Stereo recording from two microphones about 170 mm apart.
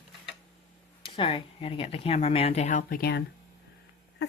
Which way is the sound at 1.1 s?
30° left (ahead or behind).